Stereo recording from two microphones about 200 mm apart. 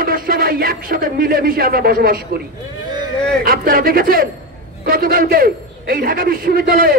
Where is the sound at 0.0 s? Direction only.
45° right (ahead or behind).